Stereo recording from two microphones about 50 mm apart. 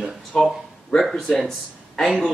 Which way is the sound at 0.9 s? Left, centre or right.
Centre.